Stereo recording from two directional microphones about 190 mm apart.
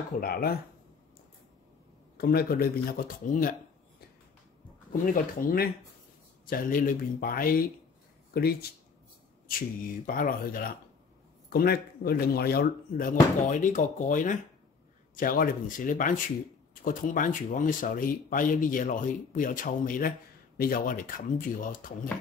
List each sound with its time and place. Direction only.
0.2 s speech: 55° left (ahead or behind)
2.1 s speech: 55° left (ahead or behind)
5.0 s speech: 45° left (ahead or behind)
10.0 s speech: 50° left (ahead or behind)